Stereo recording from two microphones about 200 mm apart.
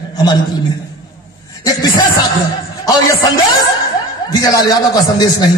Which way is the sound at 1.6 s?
20° left (ahead or behind).